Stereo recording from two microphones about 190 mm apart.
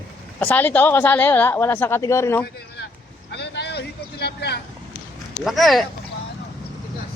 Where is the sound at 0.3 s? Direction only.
10° left (ahead or behind).